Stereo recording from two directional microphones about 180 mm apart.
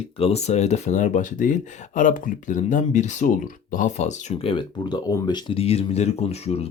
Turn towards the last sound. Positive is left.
turn(degrees=35)  # may be behind; listen again after turning